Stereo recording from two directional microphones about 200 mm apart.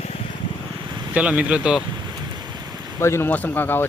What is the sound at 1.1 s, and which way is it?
Speech, 5° right (ahead or behind).